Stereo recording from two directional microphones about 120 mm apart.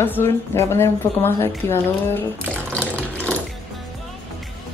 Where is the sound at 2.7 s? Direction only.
10° left (ahead or behind).